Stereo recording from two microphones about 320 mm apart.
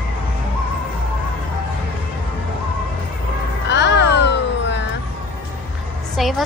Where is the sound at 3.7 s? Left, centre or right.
Left.